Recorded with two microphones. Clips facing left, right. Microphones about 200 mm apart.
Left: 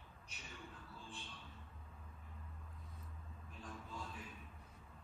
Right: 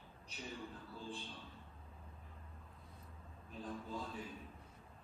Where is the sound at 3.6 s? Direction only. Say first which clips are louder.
Right 7 dB; 30° right (ahead or behind).